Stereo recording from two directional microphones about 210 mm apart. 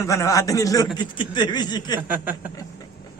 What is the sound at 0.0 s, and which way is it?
A man's voice, 15° left (ahead or behind).